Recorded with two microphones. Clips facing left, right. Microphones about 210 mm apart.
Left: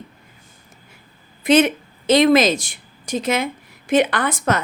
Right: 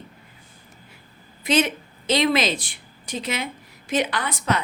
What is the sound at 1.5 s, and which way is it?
A woman's voice, 55° left (ahead or behind).